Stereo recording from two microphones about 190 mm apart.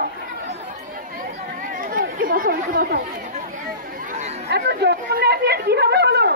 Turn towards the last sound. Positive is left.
turn(degrees=-60)  # may be behind; listen again after turning